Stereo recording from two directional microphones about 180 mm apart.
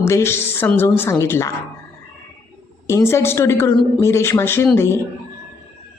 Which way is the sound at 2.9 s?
15° left (ahead or behind).